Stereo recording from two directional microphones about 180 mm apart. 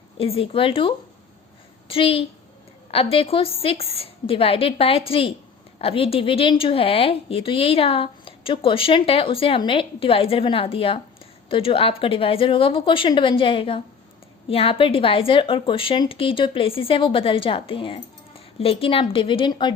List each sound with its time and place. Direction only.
0.2 s a woman's voice: 30° left (ahead or behind)